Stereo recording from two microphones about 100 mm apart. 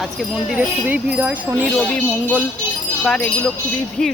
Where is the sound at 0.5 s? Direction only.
15° right (ahead or behind).